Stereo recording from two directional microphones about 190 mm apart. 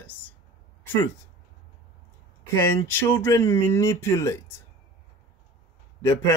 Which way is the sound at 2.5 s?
10° left (ahead or behind).